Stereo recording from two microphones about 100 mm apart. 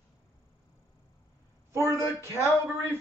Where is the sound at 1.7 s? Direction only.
30° right (ahead or behind).